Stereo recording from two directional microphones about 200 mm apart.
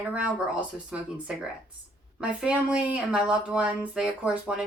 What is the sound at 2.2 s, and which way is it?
Speech, 5° right (ahead or behind).